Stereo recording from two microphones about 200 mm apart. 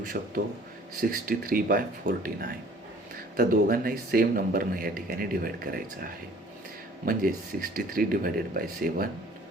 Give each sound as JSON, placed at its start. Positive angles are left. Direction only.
{"t": 0.0, "sound": "speech", "side_deg": -45}